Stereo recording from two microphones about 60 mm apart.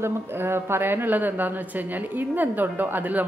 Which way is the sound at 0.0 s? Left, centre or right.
Right.